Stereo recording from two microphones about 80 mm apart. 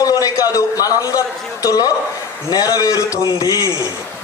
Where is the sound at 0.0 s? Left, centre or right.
Left.